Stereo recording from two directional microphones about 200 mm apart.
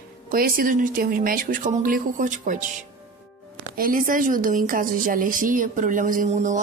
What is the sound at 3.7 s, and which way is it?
A woman's voice, 45° right (ahead or behind).